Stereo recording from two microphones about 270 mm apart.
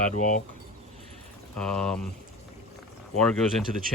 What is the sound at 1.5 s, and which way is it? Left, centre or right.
Speech, centre.